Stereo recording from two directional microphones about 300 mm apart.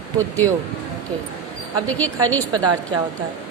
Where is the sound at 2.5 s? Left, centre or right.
Centre.